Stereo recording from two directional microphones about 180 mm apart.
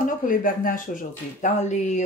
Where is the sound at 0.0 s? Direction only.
50° left (ahead or behind).